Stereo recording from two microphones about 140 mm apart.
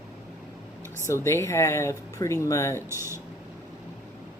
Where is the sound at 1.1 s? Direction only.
20° left (ahead or behind).